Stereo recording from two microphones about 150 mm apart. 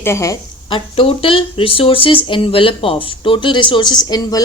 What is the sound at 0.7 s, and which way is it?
Speech, 35° left (ahead or behind).